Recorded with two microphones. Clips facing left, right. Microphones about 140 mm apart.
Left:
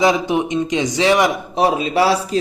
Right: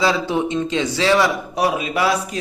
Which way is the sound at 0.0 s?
20° left (ahead or behind).